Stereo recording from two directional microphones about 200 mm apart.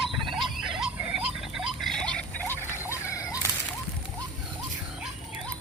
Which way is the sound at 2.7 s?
10° right (ahead or behind).